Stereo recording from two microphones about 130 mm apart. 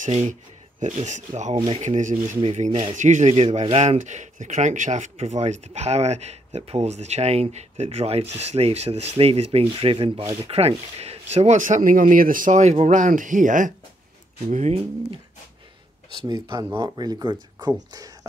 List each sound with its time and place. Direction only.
0.0 s speech: 65° right (ahead or behind); by 13.7 s 80° right
14.5 s speech: 60° right (ahead or behind)
16.3 s speech: 35° right (ahead or behind)